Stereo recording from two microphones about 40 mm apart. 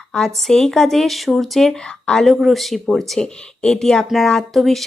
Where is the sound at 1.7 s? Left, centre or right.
Left.